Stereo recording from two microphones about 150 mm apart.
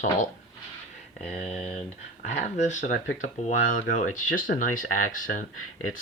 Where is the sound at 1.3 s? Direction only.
45° left (ahead or behind).